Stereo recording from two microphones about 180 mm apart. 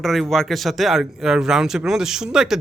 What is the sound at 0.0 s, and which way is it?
Speech, centre (ahead or behind).